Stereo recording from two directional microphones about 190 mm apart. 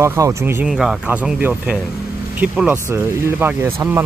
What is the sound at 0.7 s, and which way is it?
Speech, centre (ahead or behind).